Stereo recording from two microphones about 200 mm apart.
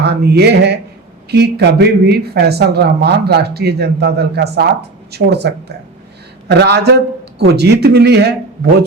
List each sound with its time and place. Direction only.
0.0 s speech: 55° right (ahead or behind)